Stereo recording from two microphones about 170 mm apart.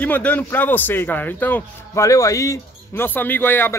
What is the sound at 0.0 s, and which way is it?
A man's voice, 10° left (ahead or behind).